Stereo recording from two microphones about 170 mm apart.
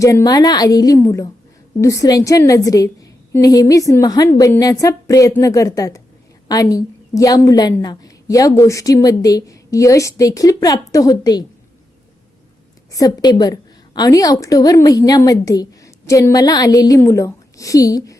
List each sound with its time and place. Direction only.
0.0 s a woman's voice: 20° left (ahead or behind)
12.9 s a woman's voice: 20° left (ahead or behind)